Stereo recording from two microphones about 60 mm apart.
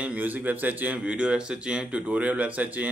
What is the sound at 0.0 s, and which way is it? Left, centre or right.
Speech, right.